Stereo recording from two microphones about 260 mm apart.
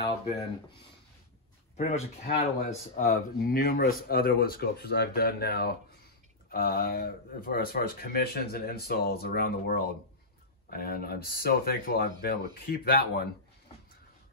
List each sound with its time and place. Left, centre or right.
0.0 s speech: left